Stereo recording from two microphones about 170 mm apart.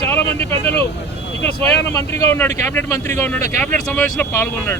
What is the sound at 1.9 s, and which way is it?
Speech, 20° left (ahead or behind).